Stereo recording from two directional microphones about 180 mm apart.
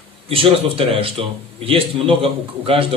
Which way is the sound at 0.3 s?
30° right (ahead or behind).